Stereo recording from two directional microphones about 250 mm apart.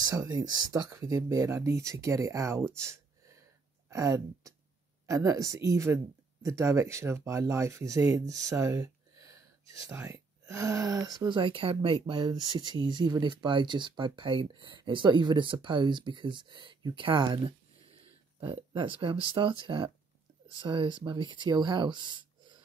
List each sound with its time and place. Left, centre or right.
0.0 s speech: centre
2.8 s a sound: centre
3.9 s speech: centre